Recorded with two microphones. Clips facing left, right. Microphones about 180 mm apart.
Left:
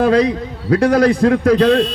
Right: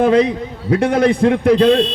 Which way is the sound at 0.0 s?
25° right (ahead or behind).